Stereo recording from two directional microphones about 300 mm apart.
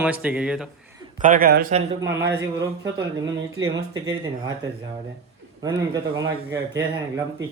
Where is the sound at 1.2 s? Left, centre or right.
Right.